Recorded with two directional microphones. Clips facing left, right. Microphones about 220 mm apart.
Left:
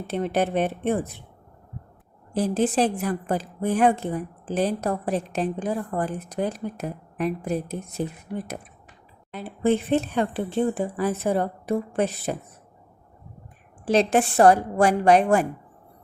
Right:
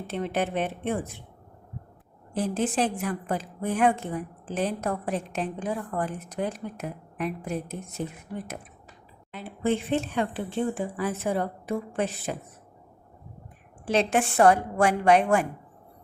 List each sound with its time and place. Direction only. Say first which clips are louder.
0.1 s a woman's voice: left 4 dB; 40° left (ahead or behind)
2.3 s a woman's voice: left 4 dB; 35° left (ahead or behind)
9.3 s a woman's voice: left 4 dB; 40° left (ahead or behind)
13.8 s a woman's voice: left 4 dB; 40° left (ahead or behind)